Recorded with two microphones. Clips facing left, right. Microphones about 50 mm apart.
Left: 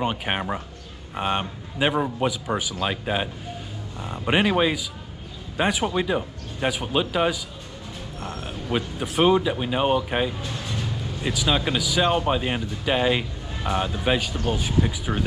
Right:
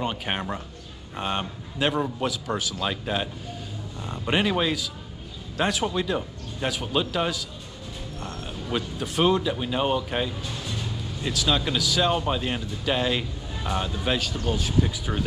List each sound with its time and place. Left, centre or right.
0.0 s speech: centre